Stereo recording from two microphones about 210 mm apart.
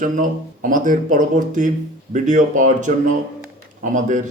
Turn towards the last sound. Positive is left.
turn(degrees=-40)  # may be behind; listen again after turning